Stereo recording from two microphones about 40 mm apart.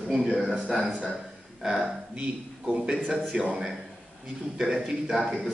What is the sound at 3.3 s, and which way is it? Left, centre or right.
Speech, centre.